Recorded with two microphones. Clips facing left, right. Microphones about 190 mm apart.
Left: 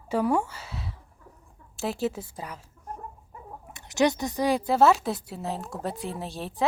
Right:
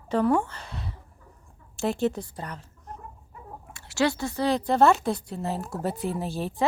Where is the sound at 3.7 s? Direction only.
20° left (ahead or behind).